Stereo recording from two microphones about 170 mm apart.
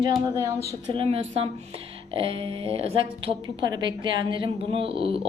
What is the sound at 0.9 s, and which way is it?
Music, 35° right (ahead or behind).